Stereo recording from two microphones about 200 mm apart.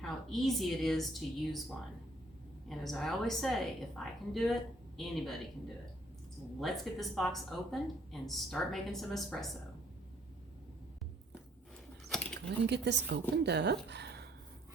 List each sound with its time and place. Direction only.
0.0 s a woman's voice: centre (ahead or behind)
2.6 s a woman's voice: centre (ahead or behind)
12.0 s a sound: 5° left (ahead or behind)
12.6 s speech: 55° right (ahead or behind)